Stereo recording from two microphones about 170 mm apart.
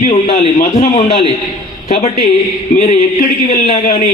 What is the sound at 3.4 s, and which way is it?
Speech, 40° left (ahead or behind).